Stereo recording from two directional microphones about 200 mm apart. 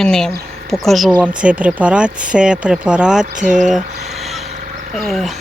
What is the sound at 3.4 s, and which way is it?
Speech, 40° right (ahead or behind).